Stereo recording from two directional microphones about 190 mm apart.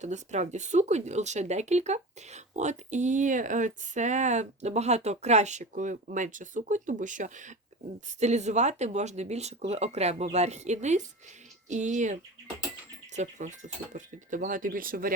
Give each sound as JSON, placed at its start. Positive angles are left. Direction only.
{"t": 0.0, "sound": "speech", "side_deg": -40}